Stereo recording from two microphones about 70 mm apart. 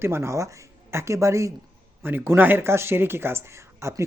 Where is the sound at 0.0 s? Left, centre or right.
Right.